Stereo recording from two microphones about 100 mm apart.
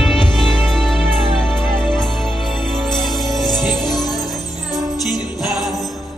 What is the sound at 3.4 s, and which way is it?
Music, centre (ahead or behind).